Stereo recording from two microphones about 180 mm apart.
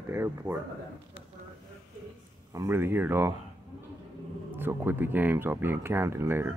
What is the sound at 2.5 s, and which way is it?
Speech, 15° right (ahead or behind).